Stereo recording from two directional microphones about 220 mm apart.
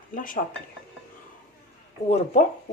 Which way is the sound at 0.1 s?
40° left (ahead or behind).